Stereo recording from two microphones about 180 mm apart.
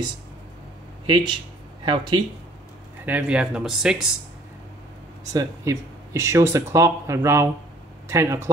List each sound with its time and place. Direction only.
1.0 s speech: 25° right (ahead or behind)
3.1 s speech: 10° right (ahead or behind)
5.3 s speech: 20° right (ahead or behind)